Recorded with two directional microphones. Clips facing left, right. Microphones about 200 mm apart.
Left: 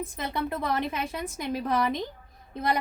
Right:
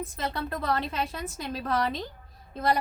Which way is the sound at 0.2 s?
15° left (ahead or behind).